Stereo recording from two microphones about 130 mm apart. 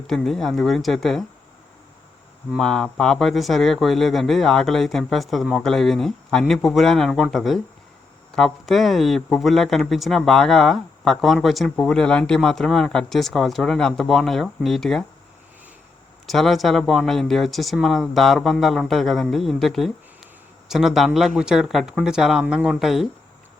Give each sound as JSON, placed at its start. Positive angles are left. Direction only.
{"t": 0.1, "sound": "speech", "side_deg": 5}
{"t": 2.6, "sound": "speech", "side_deg": 5}
{"t": 16.2, "sound": "speech", "side_deg": 0}